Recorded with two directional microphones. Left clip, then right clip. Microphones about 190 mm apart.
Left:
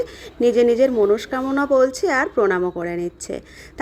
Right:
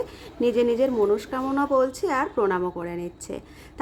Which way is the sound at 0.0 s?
20° left (ahead or behind).